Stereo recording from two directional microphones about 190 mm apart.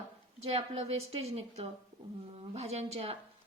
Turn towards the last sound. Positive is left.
turn(degrees=-30)  # may be behind; listen again after turning